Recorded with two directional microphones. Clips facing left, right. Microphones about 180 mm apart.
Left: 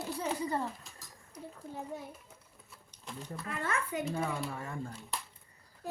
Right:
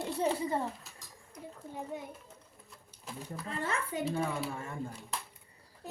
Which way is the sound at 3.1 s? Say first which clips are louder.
Right 1 dB; 5° right (ahead or behind).